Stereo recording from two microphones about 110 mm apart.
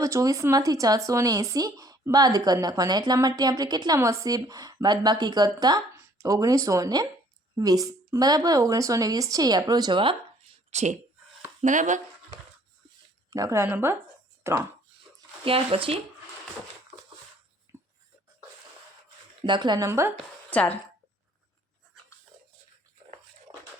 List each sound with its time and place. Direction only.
0.0 s speech: 30° right (ahead or behind); by 10.2 s 50° right (ahead or behind)
10.7 s speech: 90° right
13.3 s speech: 30° right (ahead or behind)
13.7 s speech: 20° right (ahead or behind)
15.4 s speech: 55° right (ahead or behind)
17.7 s a sound: 30° right (ahead or behind)
19.5 s a woman's voice: 45° right (ahead or behind)
19.8 s speech: 25° right (ahead or behind)
20.5 s speech: 15° left (ahead or behind)